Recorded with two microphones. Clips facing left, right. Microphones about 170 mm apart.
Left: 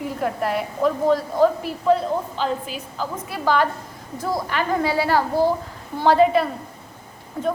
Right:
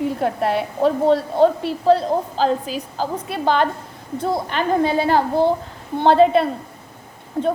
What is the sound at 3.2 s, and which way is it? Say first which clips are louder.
A woman's voice: right 1 dB; 25° right (ahead or behind).